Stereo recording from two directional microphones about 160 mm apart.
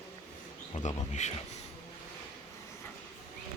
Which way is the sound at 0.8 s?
45° left (ahead or behind).